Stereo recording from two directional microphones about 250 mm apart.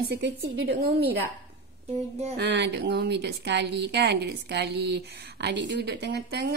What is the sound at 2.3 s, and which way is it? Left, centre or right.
Speech, right.